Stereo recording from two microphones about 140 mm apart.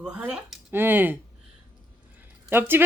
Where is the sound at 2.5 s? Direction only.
15° right (ahead or behind).